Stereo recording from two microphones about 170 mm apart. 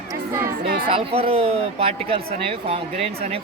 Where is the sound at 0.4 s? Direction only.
60° right (ahead or behind).